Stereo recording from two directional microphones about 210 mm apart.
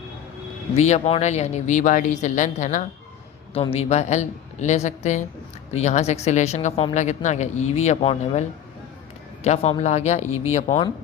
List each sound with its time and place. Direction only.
0.8 s speech: 30° left (ahead or behind)